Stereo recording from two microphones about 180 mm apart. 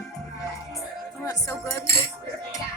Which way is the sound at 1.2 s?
20° left (ahead or behind).